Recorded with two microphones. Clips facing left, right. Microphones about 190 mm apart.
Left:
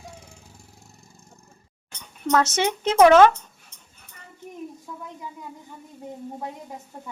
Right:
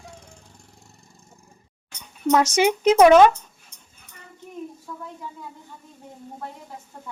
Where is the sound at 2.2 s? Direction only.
15° right (ahead or behind).